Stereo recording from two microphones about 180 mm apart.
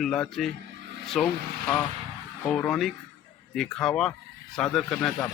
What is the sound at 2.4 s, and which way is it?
Speech, 5° left (ahead or behind).